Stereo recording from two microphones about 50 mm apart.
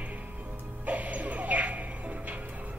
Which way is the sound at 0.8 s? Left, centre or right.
Right.